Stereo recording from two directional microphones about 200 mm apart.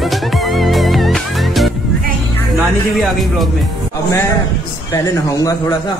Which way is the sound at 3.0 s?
Centre (ahead or behind).